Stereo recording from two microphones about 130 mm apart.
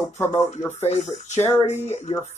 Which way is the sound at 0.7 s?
60° left (ahead or behind).